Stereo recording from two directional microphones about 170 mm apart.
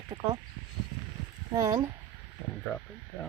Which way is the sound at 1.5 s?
20° right (ahead or behind).